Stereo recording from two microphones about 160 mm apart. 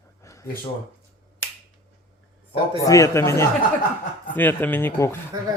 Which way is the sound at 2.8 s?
20° left (ahead or behind).